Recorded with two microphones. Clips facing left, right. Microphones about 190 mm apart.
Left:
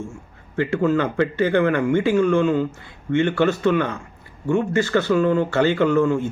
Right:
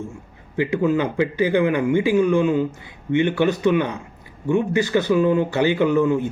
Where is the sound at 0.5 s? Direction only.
15° right (ahead or behind).